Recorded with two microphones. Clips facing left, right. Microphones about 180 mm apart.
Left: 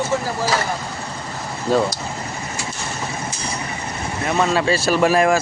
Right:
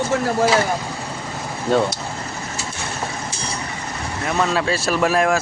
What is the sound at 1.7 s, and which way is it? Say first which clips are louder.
Speech: even; centre (ahead or behind).